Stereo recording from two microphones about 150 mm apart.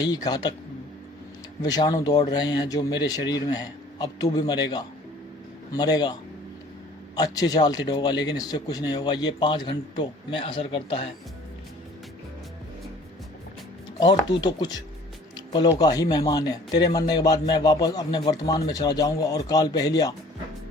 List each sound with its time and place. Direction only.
0.0 s speech: 25° left (ahead or behind)
1.6 s speech: 25° left (ahead or behind)
7.2 s speech: 25° left (ahead or behind)
14.0 s speech: 30° left (ahead or behind)
15.4 s music: 30° left (ahead or behind)
15.8 s speech: 25° left (ahead or behind)